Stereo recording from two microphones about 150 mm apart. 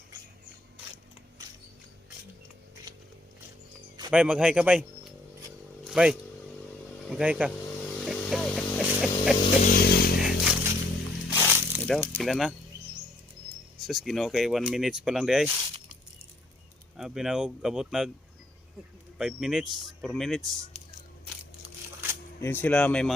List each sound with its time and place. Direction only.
4.1 s speech: 10° right (ahead or behind)
5.8 s vehicle: 5° right (ahead or behind)
7.1 s speech: 10° right (ahead or behind)
8.0 s a sound: centre (ahead or behind)
9.6 s a sound: 85° left
10.2 s a sound: 5° right (ahead or behind)
11.3 s snake: 10° right (ahead or behind)
11.9 s speech: 5° left (ahead or behind)
13.8 s speech: centre (ahead or behind)
17.0 s speech: 5° right (ahead or behind)
19.2 s speech: 5° right (ahead or behind)
22.4 s speech: 15° left (ahead or behind)